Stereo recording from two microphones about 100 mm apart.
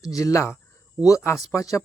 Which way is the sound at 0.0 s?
35° left (ahead or behind).